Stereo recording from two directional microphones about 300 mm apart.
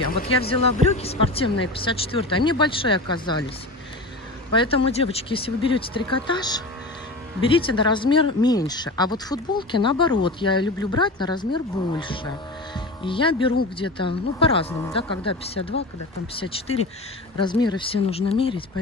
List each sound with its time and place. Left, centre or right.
0.4 s speech: centre
4.5 s speech: centre